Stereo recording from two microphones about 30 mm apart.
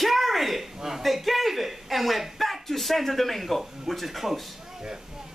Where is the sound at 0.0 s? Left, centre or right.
Centre.